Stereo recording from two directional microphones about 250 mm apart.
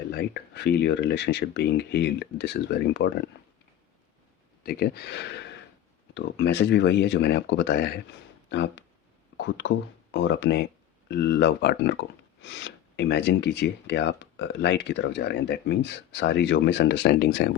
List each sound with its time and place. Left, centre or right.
0.1 s speech: left
4.6 s speech: left